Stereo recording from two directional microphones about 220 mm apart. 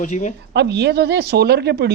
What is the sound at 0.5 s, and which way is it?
Speech, 50° right (ahead or behind).